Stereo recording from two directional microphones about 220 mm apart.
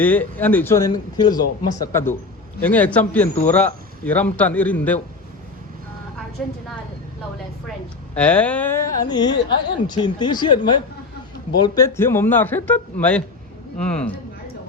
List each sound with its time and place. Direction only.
0.0 s a man's voice: 5° left (ahead or behind)
6.4 s speech: centre (ahead or behind)
8.1 s a man's voice: 5° left (ahead or behind)